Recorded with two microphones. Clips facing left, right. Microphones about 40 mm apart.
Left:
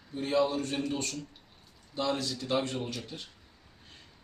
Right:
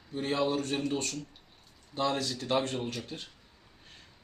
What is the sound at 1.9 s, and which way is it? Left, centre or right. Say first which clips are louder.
Speech: right 1 dB; right.